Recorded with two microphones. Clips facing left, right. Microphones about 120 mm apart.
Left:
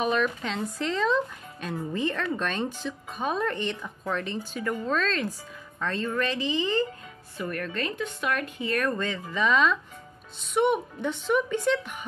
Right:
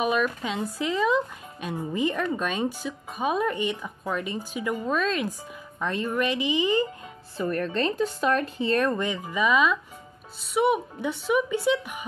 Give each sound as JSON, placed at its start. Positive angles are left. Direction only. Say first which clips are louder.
{"t": 0.0, "sound": "speech", "louder": "right 1 dB", "side_deg": -10}
{"t": 7.3, "sound": "speech", "louder": "right 5 dB", "side_deg": -30}